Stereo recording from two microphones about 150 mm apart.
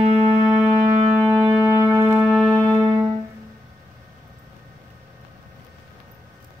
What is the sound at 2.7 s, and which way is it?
Music, 20° right (ahead or behind).